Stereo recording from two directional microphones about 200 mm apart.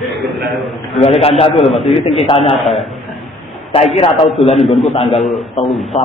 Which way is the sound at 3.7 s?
30° left (ahead or behind).